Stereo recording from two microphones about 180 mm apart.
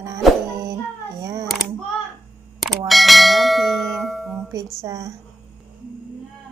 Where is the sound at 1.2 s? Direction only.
15° right (ahead or behind).